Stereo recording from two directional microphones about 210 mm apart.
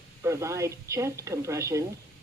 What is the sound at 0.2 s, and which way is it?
Speech, 15° right (ahead or behind).